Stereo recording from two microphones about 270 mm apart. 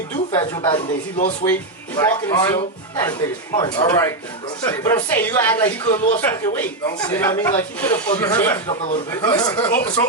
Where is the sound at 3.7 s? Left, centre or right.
Centre.